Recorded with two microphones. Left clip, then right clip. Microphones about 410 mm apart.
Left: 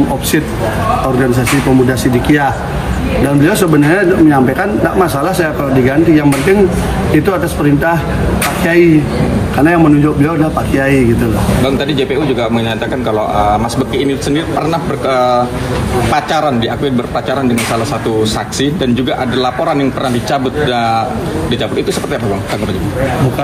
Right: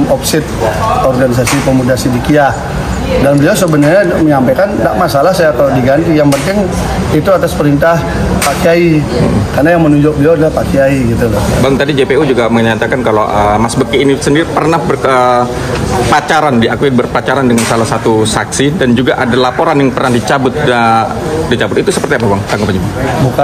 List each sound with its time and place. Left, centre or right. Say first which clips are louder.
3.9 s speech: right 1 dB; centre
12.0 s speech: right 5 dB; right
13.9 s speech: right 7 dB; right
18.6 s speech: right 3 dB; right